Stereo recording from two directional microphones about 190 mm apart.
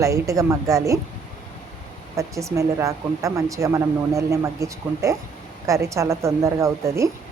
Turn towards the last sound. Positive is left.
turn(degrees=-15)  # may be behind; listen again after turning